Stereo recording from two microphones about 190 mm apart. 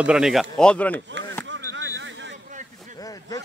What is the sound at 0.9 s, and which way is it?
Speech, 75° right (ahead or behind).